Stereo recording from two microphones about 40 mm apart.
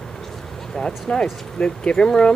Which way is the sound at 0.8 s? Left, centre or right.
Centre.